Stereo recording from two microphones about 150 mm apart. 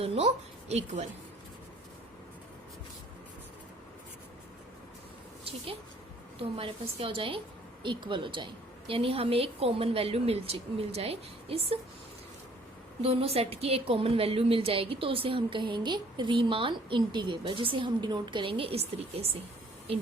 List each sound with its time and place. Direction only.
0.0 s a woman's voice: 40° right (ahead or behind)
0.7 s a woman's voice: 55° right (ahead or behind)
6.6 s a woman's voice: 35° right (ahead or behind)
13.0 s a woman's voice: 40° right (ahead or behind)